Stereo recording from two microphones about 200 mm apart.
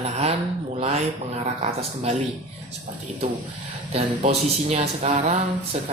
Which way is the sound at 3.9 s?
35° right (ahead or behind).